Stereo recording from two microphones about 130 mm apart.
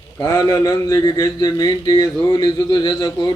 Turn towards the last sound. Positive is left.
turn(degrees=30)  # may be behind; listen again after turning